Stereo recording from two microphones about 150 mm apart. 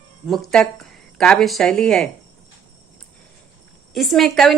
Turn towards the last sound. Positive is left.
turn(degrees=0)  # may be behind; listen again after turning